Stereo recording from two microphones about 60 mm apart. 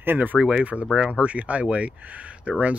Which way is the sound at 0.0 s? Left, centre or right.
Right.